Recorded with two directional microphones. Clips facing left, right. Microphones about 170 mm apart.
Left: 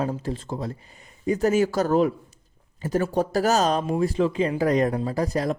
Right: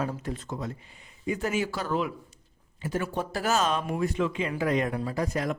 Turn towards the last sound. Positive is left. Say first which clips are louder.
# left 4 dB
turn(degrees=35)  # may be behind; listen again after turning